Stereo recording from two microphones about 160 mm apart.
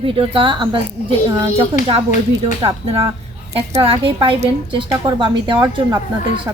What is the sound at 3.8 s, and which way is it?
A woman's voice, 35° right (ahead or behind).